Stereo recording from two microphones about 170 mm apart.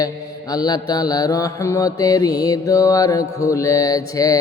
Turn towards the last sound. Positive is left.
turn(degrees=20)  # may be behind; listen again after turning